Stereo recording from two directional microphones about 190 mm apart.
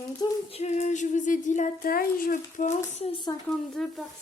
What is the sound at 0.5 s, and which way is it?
Speech, 35° left (ahead or behind).